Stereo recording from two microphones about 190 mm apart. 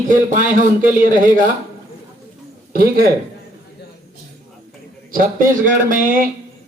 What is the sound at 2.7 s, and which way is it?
Speech, 50° right (ahead or behind).